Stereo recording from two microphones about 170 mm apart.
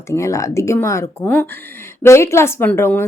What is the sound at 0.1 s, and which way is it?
A woman's voice, 15° left (ahead or behind).